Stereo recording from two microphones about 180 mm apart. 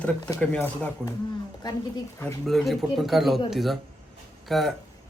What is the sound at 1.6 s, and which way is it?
Speech, 20° left (ahead or behind).